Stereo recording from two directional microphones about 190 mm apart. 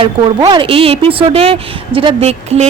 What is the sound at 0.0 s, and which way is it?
A woman's voice, 20° right (ahead or behind).